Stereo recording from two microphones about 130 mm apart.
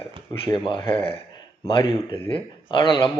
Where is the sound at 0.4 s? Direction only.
40° left (ahead or behind).